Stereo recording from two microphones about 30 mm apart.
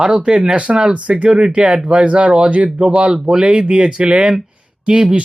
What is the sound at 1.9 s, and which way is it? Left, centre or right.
Speech, right.